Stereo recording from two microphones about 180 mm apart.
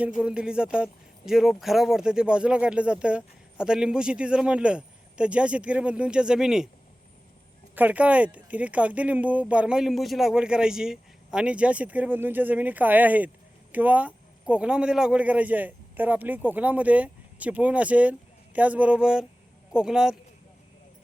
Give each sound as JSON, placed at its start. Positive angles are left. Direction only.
{"t": 0.2, "sound": "speech", "side_deg": -5}
{"t": 7.8, "sound": "speech", "side_deg": -10}